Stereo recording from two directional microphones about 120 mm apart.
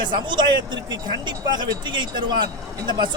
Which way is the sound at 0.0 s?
40° right (ahead or behind).